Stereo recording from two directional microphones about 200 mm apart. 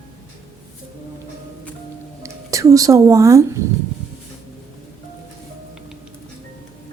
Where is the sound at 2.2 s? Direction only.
15° right (ahead or behind).